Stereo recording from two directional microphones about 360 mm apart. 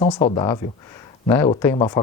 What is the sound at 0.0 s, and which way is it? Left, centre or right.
Speech, centre.